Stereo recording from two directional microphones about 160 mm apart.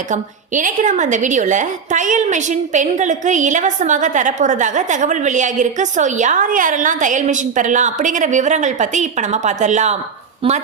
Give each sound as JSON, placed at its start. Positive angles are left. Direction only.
{"t": 0.1, "sound": "a woman's voice", "side_deg": -55}